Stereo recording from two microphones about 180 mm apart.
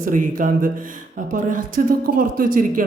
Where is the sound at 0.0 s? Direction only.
50° right (ahead or behind).